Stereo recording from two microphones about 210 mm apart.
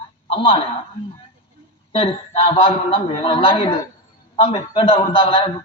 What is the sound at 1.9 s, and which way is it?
A man's voice, 25° left (ahead or behind).